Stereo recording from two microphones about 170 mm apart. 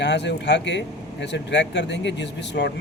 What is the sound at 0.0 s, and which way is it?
Speech, 90° left.